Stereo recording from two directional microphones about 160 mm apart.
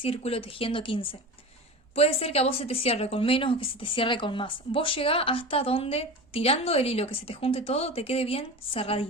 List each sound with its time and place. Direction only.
0.0 s a woman's voice: 35° left (ahead or behind)